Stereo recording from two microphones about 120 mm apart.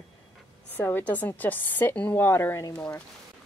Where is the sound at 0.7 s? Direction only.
15° left (ahead or behind).